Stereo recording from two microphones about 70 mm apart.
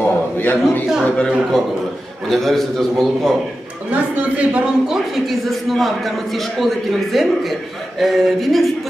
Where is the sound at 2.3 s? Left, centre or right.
Centre.